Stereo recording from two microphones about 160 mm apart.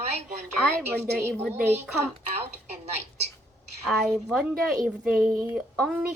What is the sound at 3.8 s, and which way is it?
A woman's voice, centre (ahead or behind).